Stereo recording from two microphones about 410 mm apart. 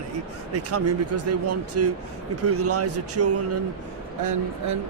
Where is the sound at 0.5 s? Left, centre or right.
Right.